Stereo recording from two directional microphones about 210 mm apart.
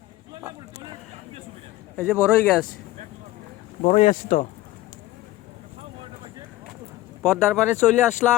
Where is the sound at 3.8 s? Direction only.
35° left (ahead or behind).